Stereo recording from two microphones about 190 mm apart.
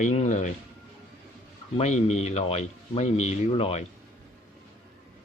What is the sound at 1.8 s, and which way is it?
Speech, 35° left (ahead or behind).